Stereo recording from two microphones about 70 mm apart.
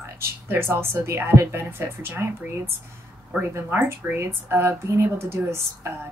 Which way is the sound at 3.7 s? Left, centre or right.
Right.